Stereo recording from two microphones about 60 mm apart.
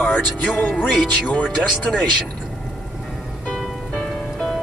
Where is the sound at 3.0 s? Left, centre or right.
Centre.